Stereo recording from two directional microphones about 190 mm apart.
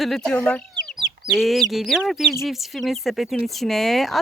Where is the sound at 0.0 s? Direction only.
Centre (ahead or behind).